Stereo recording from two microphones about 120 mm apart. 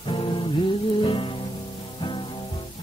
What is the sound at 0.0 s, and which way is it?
Music, 45° left (ahead or behind).